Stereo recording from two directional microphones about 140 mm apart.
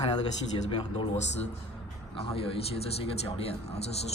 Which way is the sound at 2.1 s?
40° left (ahead or behind).